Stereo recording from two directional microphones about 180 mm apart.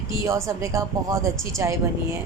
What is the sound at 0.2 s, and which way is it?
A woman's voice, 15° right (ahead or behind).